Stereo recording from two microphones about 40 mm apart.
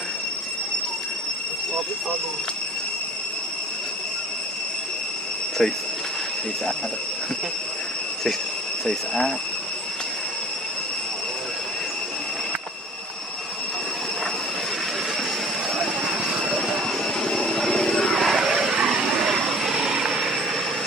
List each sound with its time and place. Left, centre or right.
5.6 s speech: centre
8.8 s speech: centre
16.3 s vehicle: centre
16.7 s vehicle: centre
18.2 s vehicle: centre
18.5 s vehicle: centre